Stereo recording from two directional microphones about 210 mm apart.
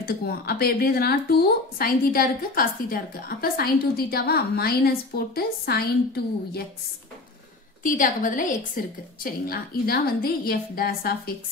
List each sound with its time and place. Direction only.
0.0 s a woman's voice: 45° left (ahead or behind)
7.8 s a woman's voice: 40° left (ahead or behind)